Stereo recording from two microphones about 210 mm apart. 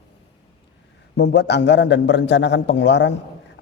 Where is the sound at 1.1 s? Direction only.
55° left (ahead or behind).